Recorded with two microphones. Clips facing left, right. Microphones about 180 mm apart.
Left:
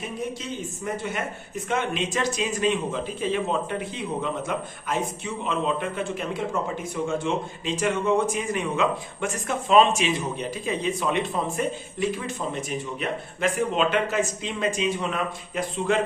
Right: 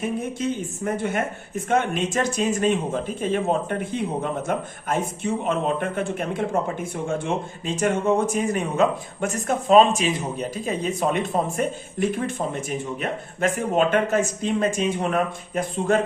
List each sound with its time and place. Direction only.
0.9 s speech: 50° right (ahead or behind)